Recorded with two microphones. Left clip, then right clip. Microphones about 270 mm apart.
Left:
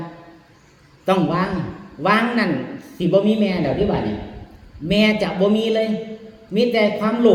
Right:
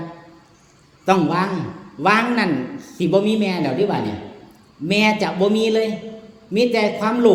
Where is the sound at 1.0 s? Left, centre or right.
Centre.